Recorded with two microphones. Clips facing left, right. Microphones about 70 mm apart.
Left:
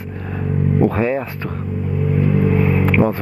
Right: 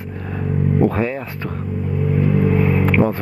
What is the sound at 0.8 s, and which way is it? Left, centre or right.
Speech, left.